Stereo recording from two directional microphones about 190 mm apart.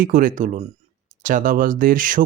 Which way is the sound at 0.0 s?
45° right (ahead or behind).